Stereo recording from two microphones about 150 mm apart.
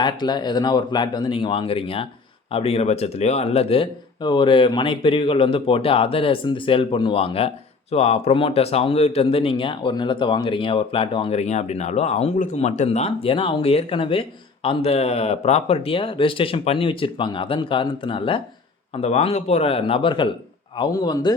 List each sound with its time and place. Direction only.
0.0 s speech: 30° left (ahead or behind)